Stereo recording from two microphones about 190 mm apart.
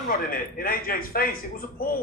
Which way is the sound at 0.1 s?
50° left (ahead or behind).